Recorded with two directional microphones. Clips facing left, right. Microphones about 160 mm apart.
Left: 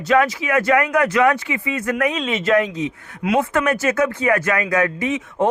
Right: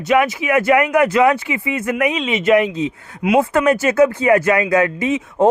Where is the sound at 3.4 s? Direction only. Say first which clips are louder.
Right 5 dB; 30° right (ahead or behind).